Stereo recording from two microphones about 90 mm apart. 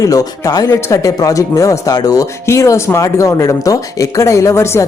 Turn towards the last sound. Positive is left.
turn(degrees=30)  # may be behind; listen again after turning